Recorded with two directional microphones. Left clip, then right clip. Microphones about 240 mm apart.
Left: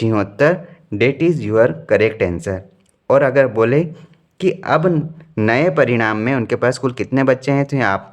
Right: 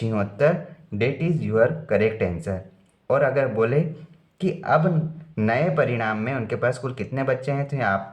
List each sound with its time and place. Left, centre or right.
0.0 s speech: left